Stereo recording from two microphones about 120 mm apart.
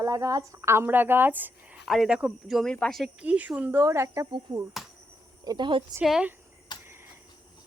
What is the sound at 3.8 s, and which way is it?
Speech, 25° right (ahead or behind).